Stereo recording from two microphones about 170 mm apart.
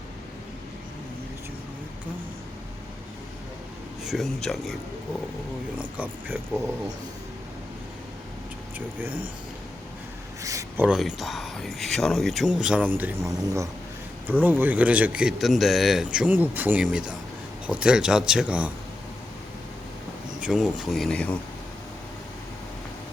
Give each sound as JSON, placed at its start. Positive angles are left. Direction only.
{"t": 4.0, "sound": "speech", "side_deg": 0}
{"t": 6.0, "sound": "a man's voice", "side_deg": -10}
{"t": 9.0, "sound": "speech", "side_deg": -55}
{"t": 10.4, "sound": "a sound", "side_deg": -20}
{"t": 10.8, "sound": "a man's voice", "side_deg": 0}
{"t": 20.4, "sound": "speech", "side_deg": -5}